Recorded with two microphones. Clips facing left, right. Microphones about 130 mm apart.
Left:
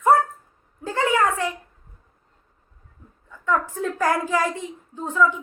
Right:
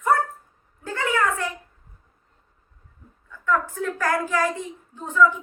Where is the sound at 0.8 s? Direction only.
25° left (ahead or behind).